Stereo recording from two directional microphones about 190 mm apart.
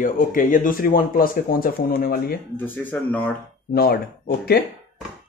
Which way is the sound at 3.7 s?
50° left (ahead or behind).